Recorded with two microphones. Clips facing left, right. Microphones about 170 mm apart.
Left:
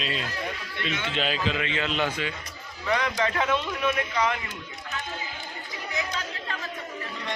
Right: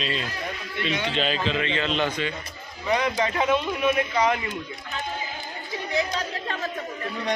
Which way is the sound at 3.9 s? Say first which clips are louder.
Right 4 dB; 30° right (ahead or behind).